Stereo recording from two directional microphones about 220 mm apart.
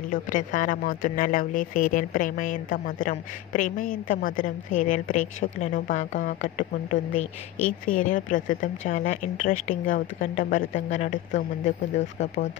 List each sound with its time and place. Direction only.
0.1 s speech: 35° left (ahead or behind)